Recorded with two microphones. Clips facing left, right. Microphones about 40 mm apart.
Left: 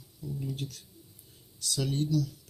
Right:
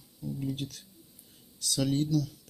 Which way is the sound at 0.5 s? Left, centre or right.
Right.